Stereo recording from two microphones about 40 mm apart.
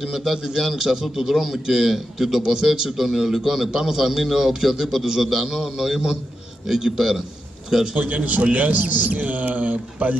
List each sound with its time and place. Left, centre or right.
0.0 s a man's voice: centre
7.9 s a man's voice: right